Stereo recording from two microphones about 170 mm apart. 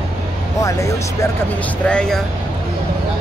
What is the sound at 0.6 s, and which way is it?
Speech, 20° left (ahead or behind).